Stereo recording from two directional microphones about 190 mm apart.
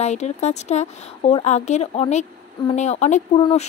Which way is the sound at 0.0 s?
35° left (ahead or behind).